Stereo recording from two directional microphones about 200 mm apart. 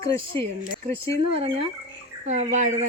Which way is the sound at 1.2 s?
25° right (ahead or behind).